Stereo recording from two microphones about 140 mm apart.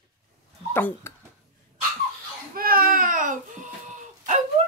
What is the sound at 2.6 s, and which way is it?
A child's voice, 90° right.